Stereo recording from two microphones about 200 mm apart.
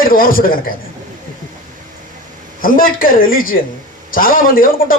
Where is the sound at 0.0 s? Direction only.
45° left (ahead or behind).